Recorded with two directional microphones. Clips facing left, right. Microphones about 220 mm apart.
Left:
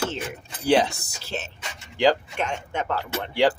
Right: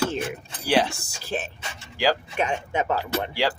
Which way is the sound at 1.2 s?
15° right (ahead or behind).